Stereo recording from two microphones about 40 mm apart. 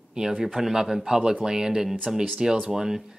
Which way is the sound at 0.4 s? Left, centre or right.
Centre.